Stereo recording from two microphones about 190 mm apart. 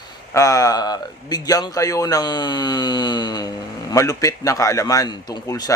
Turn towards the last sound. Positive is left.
turn(degrees=20)  # may be behind; listen again after turning